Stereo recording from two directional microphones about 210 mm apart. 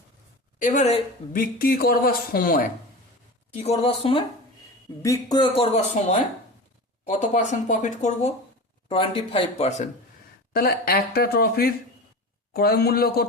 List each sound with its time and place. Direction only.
0.6 s a woman's voice: 35° left (ahead or behind)
1.4 s speech: 45° left (ahead or behind)
3.5 s a woman's voice: 30° left (ahead or behind)
10.5 s speech: 45° left (ahead or behind)